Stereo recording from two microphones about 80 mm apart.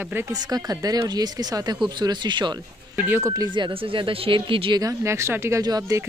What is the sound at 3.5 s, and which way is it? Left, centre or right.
Speech, right.